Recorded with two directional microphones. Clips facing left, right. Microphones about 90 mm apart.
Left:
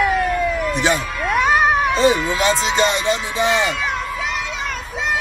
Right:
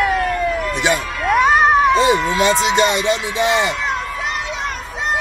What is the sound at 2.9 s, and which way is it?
Speech, 35° left (ahead or behind).